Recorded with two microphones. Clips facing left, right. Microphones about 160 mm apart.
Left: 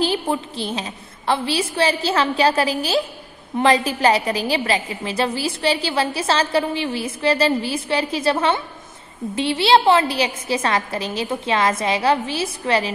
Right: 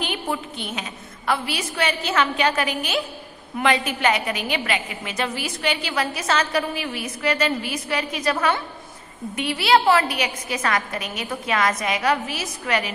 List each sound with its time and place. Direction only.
0.0 s a woman's voice: 30° left (ahead or behind)